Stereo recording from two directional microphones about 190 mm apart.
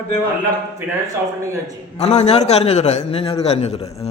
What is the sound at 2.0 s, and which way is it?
A man's voice, 35° left (ahead or behind).